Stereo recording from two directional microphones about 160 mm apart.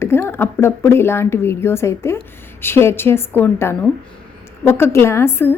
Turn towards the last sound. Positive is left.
turn(degrees=15)  # may be behind; listen again after turning